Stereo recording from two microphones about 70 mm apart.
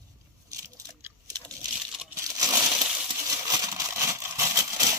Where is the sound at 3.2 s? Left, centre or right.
Right.